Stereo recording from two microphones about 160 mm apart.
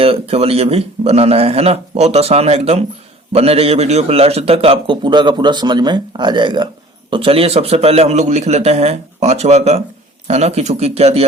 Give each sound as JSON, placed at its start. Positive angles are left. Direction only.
{"t": 0.0, "sound": "a man's voice", "side_deg": -40}